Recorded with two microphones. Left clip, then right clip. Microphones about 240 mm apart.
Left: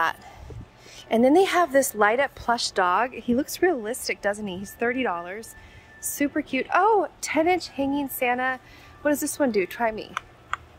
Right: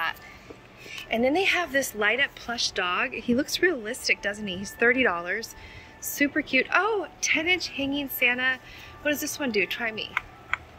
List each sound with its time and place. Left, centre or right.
1.1 s a woman's voice: left